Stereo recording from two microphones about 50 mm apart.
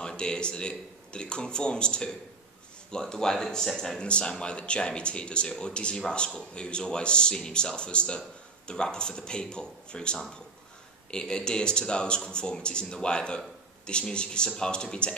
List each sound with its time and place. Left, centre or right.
0.0 s speech: centre
4.0 s speech: left